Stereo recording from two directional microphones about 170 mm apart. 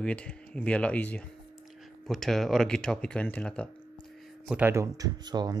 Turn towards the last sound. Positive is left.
turn(degrees=-25)  # may be behind; listen again after turning